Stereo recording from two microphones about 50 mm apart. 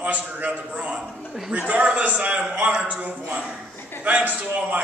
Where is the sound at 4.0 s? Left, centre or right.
Right.